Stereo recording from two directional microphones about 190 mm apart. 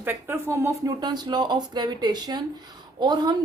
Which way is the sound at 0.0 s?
10° right (ahead or behind).